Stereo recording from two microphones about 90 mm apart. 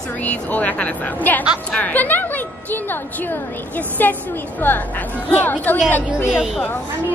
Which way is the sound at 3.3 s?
20° left (ahead or behind).